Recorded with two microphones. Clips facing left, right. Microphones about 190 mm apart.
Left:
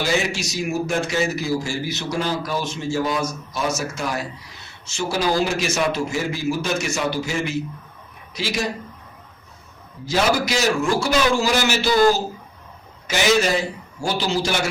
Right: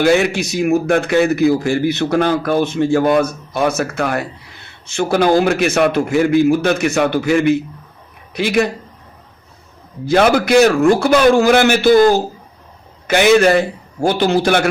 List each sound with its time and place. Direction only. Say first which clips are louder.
0.0 s a man's voice: right 9 dB; 60° right (ahead or behind)
10.1 s a man's voice: right 8 dB; 60° right (ahead or behind)